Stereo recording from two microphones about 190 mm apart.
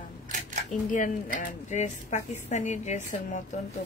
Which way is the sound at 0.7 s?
45° left (ahead or behind).